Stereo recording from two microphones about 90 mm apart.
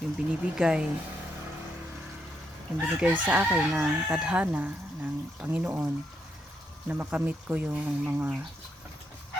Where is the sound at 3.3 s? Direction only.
15° right (ahead or behind).